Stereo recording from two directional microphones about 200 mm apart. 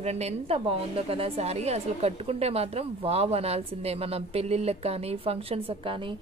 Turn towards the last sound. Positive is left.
turn(degrees=-30)  # may be behind; listen again after turning